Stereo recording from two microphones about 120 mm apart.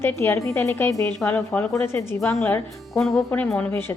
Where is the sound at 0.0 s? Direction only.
20° left (ahead or behind).